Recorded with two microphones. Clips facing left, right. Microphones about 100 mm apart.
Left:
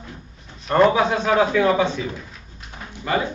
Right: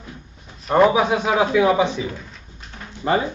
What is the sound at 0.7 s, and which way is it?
A man's voice, 10° right (ahead or behind).